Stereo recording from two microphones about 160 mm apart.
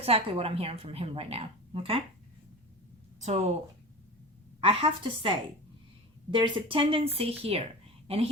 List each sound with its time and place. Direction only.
0.0 s a woman's voice: 40° right (ahead or behind)
3.2 s a woman's voice: 45° right (ahead or behind)
4.6 s a woman's voice: 35° right (ahead or behind)
6.3 s a woman's voice: 30° right (ahead or behind)